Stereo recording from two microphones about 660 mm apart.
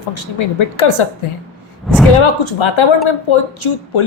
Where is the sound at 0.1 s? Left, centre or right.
Left.